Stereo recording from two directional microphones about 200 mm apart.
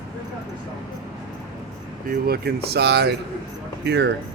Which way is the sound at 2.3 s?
55° right (ahead or behind).